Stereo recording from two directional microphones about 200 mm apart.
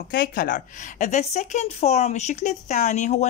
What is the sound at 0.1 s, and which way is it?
A woman's voice, 50° left (ahead or behind).